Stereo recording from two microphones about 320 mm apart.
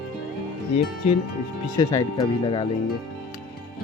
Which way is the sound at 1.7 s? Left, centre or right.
Centre.